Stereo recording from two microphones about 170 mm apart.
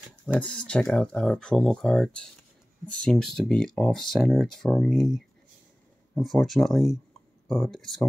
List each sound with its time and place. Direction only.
0.4 s speech: 5° left (ahead or behind)
6.2 s speech: centre (ahead or behind)